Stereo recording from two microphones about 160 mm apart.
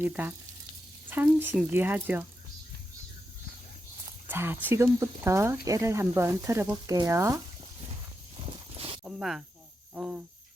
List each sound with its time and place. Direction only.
0.0 s speech: 10° right (ahead or behind)
4.3 s speech: 15° right (ahead or behind)
8.7 s a sound: 40° right (ahead or behind)
9.0 s speech: 5° right (ahead or behind)